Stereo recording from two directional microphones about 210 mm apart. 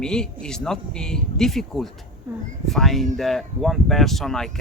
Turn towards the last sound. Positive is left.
turn(degrees=0)  # may be behind; listen again after turning